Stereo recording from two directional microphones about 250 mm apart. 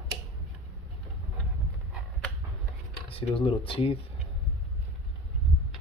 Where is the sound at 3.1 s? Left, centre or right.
Left.